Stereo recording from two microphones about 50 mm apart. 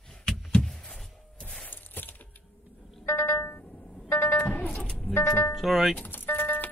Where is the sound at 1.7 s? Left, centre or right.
Left.